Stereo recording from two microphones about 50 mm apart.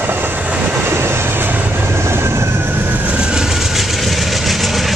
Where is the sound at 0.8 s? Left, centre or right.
Right.